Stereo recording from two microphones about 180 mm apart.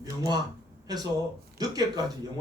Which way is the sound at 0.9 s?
20° right (ahead or behind).